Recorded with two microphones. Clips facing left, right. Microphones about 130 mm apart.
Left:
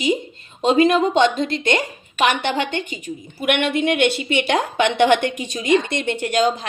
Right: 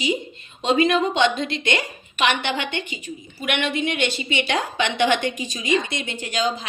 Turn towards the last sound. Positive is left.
turn(degrees=60)  # may be behind; listen again after turning